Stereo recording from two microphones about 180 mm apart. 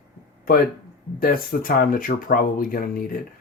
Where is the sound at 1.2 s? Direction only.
55° left (ahead or behind).